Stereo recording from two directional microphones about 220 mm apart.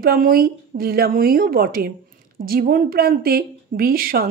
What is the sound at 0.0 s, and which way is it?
Speech, 40° right (ahead or behind).